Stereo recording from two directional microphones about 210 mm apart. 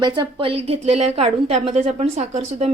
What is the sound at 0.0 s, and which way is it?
A woman's voice, 20° right (ahead or behind).